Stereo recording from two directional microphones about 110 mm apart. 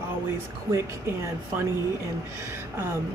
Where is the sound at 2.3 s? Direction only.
25° right (ahead or behind).